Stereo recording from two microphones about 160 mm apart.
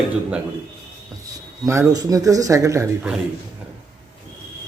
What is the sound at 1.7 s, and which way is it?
Speech, 20° right (ahead or behind).